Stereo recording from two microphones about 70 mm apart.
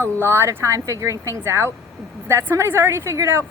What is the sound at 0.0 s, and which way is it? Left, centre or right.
Speech, right.